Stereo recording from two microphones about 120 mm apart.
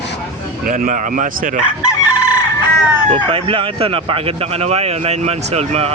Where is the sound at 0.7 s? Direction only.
90° right.